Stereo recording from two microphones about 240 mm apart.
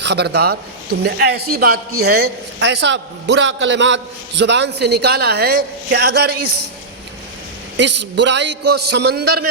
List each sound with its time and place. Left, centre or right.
0.0 s a man's voice: right
7.8 s a man's voice: right